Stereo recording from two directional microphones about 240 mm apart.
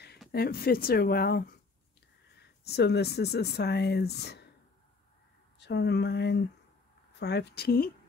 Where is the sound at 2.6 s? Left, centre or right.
Left.